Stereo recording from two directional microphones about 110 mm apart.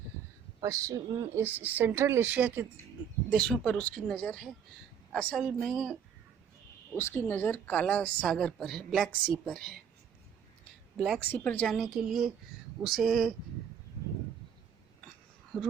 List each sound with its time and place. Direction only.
0.6 s a woman's voice: 30° right (ahead or behind)
1.5 s speech: 15° right (ahead or behind)
3.2 s a woman's voice: 5° left (ahead or behind)
6.9 s a woman's voice: 20° left (ahead or behind)
10.9 s speech: 5° right (ahead or behind)
11.2 s a woman's voice: 15° left (ahead or behind)
12.0 s speech: 5° right (ahead or behind)
15.5 s speech: 5° left (ahead or behind)